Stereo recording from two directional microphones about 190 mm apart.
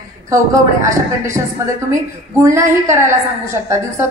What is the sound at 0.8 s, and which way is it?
Speech, 15° right (ahead or behind).